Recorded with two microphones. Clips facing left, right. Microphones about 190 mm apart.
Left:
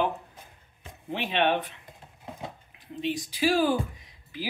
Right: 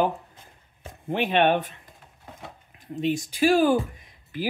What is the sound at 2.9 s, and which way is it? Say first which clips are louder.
Speech: right 5 dB; 45° right (ahead or behind).